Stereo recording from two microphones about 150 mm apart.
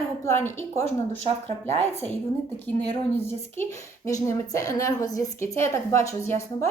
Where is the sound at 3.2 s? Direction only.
20° left (ahead or behind).